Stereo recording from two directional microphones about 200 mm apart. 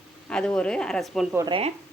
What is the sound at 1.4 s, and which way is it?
Speech, 25° right (ahead or behind).